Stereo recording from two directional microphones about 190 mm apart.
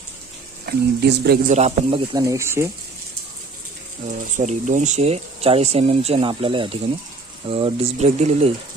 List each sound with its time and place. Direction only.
0.6 s speech: 60° right (ahead or behind)
1.5 s speech: 35° right (ahead or behind)
2.1 s speech: 15° right (ahead or behind)
4.4 s speech: 40° right (ahead or behind)